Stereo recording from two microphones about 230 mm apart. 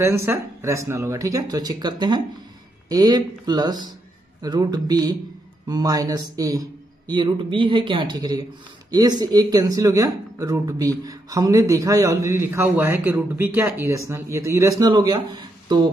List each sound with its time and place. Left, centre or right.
0.0 s speech: centre